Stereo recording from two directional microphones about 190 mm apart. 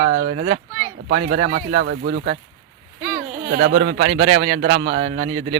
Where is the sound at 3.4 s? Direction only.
55° right (ahead or behind).